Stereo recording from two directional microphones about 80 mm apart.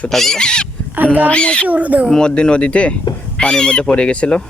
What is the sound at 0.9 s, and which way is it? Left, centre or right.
Speech, right.